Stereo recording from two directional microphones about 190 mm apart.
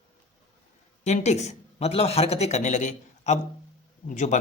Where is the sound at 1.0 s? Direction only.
35° left (ahead or behind).